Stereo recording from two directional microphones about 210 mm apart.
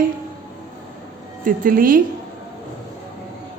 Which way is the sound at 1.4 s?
40° right (ahead or behind).